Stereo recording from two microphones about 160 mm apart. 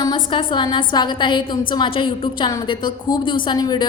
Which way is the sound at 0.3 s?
30° left (ahead or behind).